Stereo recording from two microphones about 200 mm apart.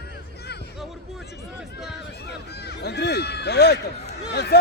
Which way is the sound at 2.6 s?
55° left (ahead or behind).